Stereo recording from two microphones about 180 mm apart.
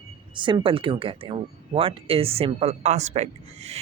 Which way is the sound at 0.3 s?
25° right (ahead or behind).